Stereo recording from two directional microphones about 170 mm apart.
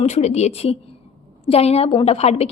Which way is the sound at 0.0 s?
40° left (ahead or behind).